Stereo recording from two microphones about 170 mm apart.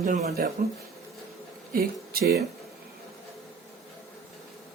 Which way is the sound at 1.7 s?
60° right (ahead or behind).